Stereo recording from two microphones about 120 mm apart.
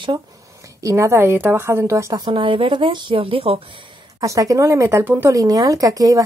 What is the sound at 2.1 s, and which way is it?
Speech, 40° right (ahead or behind).